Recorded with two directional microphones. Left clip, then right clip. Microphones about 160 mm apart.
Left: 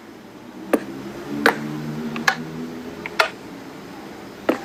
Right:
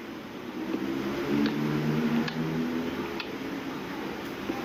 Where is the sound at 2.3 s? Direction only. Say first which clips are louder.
Left 15 dB; 75° left (ahead or behind).